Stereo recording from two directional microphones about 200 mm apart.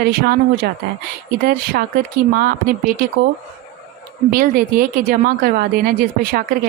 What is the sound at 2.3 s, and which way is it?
Speech, 45° right (ahead or behind).